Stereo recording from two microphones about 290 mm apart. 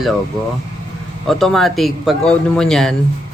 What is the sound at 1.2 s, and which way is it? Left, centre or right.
A man's voice, centre.